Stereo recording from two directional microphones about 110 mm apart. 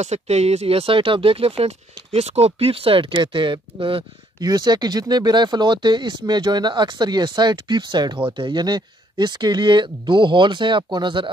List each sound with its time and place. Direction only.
0.0 s speech: 85° right; by 1.7 s 60° right (ahead or behind)
2.1 s speech: 70° right (ahead or behind); by 4.0 s 50° right (ahead or behind)
4.4 s speech: 40° right (ahead or behind)